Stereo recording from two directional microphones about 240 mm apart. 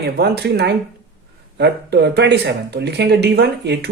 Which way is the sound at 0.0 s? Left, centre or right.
Right.